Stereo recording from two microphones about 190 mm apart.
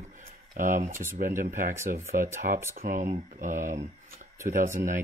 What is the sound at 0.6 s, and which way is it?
Speech, 40° right (ahead or behind).